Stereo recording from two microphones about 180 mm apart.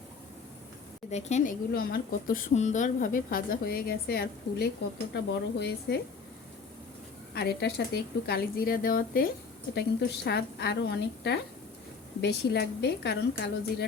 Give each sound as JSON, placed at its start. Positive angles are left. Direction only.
{"t": 1.1, "sound": "speech", "side_deg": 40}
{"t": 7.3, "sound": "speech", "side_deg": 65}
{"t": 9.7, "sound": "speech", "side_deg": 70}